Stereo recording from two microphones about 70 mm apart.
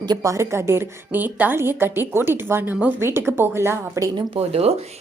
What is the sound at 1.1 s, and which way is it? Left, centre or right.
Speech, right.